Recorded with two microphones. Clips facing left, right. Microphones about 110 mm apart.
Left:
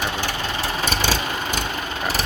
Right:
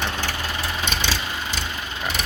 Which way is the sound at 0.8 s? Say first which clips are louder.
Left 4 dB; 45° left (ahead or behind).